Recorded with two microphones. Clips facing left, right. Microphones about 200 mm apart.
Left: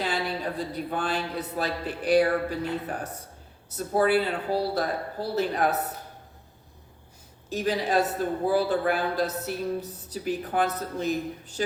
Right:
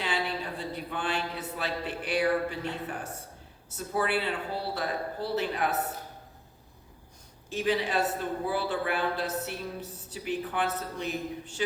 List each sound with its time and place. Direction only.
0.7 s a woman's voice: 40° left (ahead or behind)
7.5 s a woman's voice: 40° left (ahead or behind)